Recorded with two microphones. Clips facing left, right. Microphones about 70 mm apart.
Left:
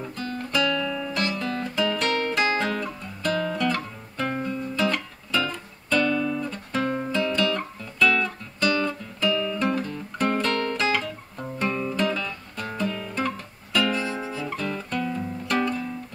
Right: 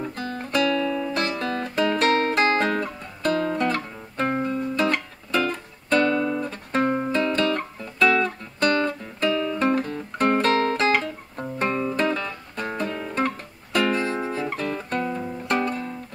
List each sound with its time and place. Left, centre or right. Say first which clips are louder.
0.2 s guitar: right 1 dB; right
6.0 s guitar: right 2 dB; right
8.0 s music: right 2 dB; right
10.5 s guitar: right 4 dB; right
13.9 s music: right 3 dB; right